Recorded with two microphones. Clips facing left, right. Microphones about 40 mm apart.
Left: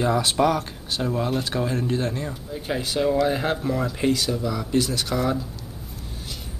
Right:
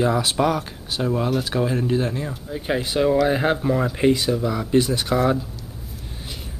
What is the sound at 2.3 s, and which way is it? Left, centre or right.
Speech, centre.